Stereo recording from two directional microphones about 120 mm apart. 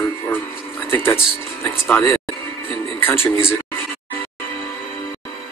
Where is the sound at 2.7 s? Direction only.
20° left (ahead or behind).